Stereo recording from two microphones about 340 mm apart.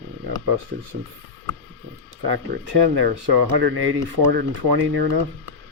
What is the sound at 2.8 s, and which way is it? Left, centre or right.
Speech, right.